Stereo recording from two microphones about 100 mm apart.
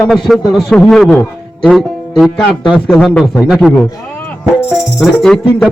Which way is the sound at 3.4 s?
5° right (ahead or behind).